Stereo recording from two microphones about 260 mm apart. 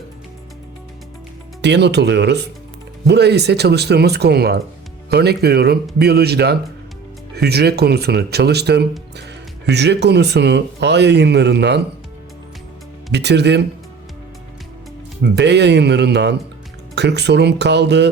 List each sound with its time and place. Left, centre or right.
1.6 s speech: right
13.1 s speech: right
15.2 s speech: right